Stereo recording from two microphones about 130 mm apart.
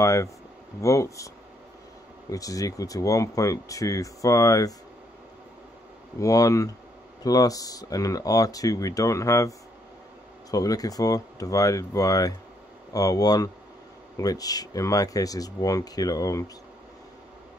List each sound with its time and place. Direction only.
0.0 s speech: 25° left (ahead or behind)
2.3 s speech: 25° left (ahead or behind)
6.1 s speech: 25° left (ahead or behind)
10.5 s speech: 30° left (ahead or behind)